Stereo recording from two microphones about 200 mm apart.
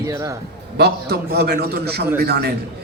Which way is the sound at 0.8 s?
55° right (ahead or behind).